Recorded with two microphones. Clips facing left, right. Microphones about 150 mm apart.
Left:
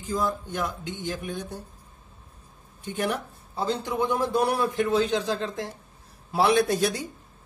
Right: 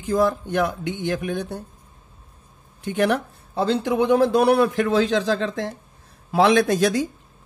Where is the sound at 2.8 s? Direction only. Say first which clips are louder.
Right 7 dB; 80° right.